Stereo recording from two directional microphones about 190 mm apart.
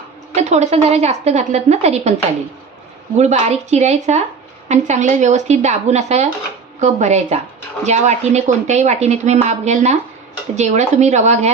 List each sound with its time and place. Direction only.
0.3 s a woman's voice: 35° right (ahead or behind)
3.2 s a woman's voice: 40° right (ahead or behind)